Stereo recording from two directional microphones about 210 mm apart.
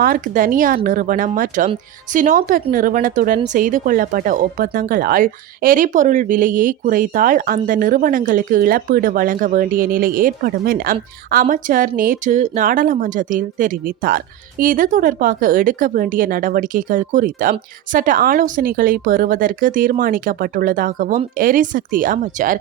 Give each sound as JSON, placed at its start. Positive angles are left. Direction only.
{"t": 0.0, "sound": "speech", "side_deg": -40}